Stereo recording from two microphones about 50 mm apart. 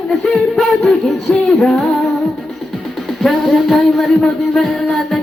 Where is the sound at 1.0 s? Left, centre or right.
Centre.